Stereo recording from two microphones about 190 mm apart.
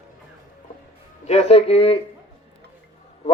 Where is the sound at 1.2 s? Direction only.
35° left (ahead or behind).